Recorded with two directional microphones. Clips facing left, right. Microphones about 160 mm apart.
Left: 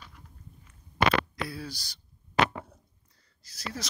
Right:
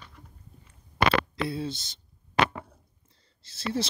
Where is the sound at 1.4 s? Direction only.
25° right (ahead or behind).